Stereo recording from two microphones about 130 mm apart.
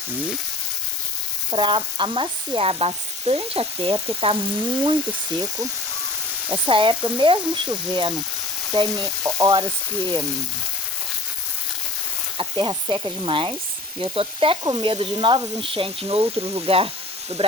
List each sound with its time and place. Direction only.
1.5 s sizzle: 40° right (ahead or behind)
4.2 s speech: 40° right (ahead or behind)
5.4 s frying: 25° right (ahead or behind)
6.7 s speech: 40° right (ahead or behind)
9.0 s frying: 25° right (ahead or behind)
12.4 s speech: 40° right (ahead or behind)
14.0 s sizzle: 45° right (ahead or behind)